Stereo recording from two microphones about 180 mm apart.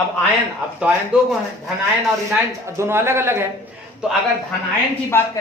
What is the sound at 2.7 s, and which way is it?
Speech, 15° right (ahead or behind).